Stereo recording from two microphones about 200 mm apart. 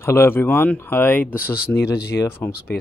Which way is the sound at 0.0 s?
10° left (ahead or behind).